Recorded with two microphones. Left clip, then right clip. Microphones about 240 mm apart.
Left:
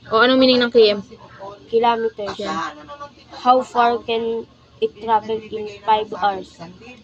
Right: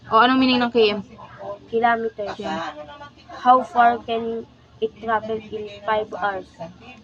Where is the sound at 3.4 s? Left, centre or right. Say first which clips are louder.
Even; centre.